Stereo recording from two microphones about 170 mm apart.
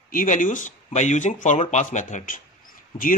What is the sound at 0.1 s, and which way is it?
Speech, 50° left (ahead or behind).